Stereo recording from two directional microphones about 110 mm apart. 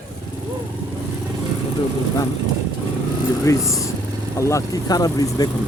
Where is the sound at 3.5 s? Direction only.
30° left (ahead or behind).